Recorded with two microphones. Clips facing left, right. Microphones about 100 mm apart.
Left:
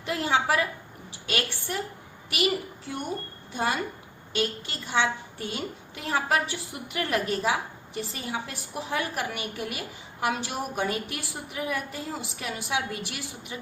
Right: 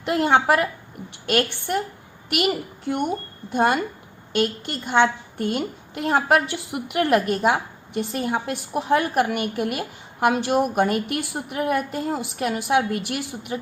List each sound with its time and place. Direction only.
0.0 s a woman's voice: 60° right (ahead or behind)
3.5 s a woman's voice: 60° right (ahead or behind)